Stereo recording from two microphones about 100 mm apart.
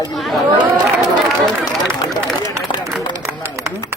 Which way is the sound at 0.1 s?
Centre (ahead or behind).